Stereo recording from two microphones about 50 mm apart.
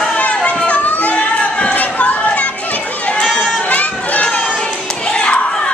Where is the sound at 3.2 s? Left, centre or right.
Centre.